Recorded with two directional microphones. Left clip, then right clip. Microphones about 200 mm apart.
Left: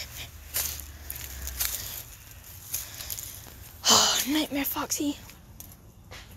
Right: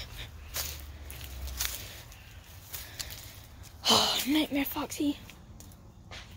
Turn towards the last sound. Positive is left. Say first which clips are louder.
# left 2 dB
turn(degrees=-5)  # may be behind; listen again after turning